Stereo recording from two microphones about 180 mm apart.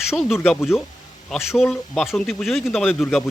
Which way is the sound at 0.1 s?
Centre (ahead or behind).